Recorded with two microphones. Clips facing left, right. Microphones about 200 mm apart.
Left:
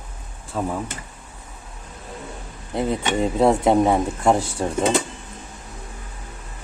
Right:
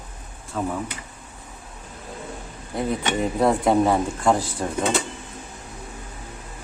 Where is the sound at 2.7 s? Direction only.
25° left (ahead or behind).